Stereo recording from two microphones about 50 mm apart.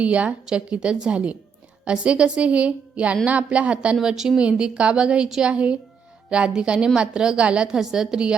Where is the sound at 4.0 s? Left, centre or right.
Centre.